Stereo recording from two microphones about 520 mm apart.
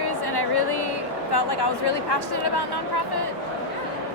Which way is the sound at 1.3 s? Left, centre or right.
Left.